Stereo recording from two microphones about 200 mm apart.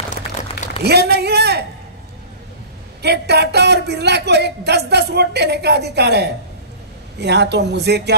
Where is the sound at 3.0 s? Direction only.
55° right (ahead or behind).